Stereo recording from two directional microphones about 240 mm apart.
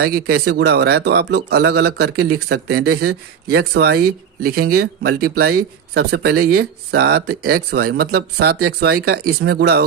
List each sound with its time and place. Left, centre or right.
0.0 s speech: right